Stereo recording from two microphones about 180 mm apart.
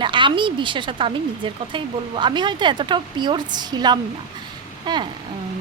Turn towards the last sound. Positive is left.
turn(degrees=-25)  # may be behind; listen again after turning